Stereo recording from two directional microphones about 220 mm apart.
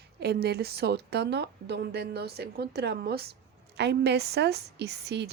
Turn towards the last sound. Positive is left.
turn(degrees=-50)  # may be behind; listen again after turning